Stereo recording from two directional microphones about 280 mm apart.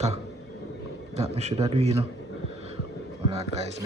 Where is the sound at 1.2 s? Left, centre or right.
Right.